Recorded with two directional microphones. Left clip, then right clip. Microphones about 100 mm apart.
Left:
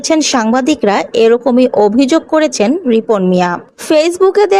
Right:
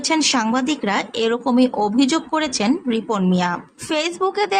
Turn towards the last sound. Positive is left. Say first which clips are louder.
# left 10 dB
turn(degrees=40)  # may be behind; listen again after turning